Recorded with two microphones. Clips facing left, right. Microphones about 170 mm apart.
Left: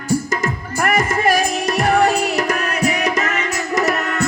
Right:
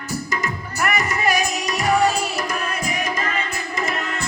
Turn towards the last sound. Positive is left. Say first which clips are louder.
# left 6 dB
turn(degrees=80)